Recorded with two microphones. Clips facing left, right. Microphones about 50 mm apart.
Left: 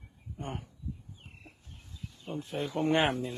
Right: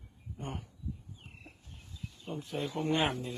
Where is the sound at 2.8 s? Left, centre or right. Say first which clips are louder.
Left 4 dB; left.